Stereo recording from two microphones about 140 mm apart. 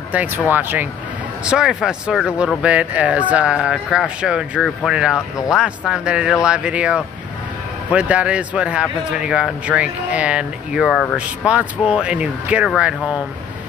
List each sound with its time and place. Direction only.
0.1 s speech: 10° right (ahead or behind)